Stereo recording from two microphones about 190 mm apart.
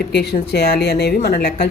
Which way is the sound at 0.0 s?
60° left (ahead or behind).